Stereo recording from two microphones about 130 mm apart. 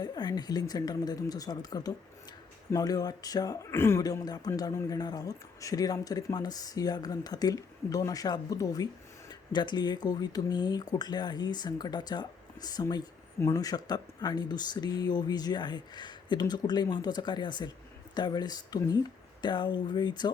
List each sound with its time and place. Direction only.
0.0 s a man's voice: 30° left (ahead or behind)